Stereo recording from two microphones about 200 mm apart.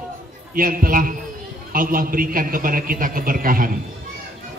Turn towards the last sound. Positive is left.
turn(degrees=-45)  # may be behind; listen again after turning